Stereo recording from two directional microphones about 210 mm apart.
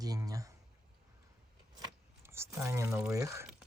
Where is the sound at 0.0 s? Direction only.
15° right (ahead or behind).